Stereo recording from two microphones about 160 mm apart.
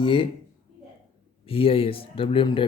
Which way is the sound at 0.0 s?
30° left (ahead or behind).